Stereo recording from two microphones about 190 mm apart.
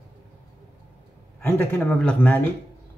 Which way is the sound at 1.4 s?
10° left (ahead or behind).